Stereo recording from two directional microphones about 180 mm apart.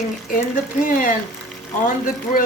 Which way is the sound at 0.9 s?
50° left (ahead or behind).